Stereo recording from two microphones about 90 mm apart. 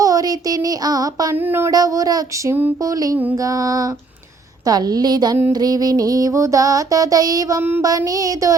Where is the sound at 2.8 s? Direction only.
40° right (ahead or behind).